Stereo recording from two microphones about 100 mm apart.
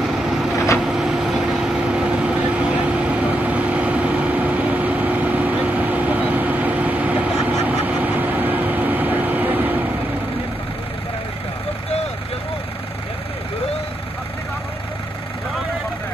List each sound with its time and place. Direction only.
0.2 s vehicle: 5° right (ahead or behind); by 9.8 s 20° right (ahead or behind)